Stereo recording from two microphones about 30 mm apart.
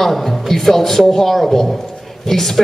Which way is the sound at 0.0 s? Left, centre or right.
Centre.